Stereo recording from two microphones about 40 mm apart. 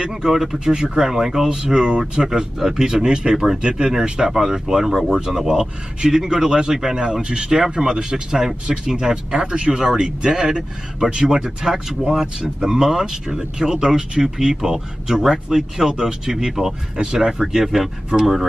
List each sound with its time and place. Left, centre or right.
0.1 s a man's voice: centre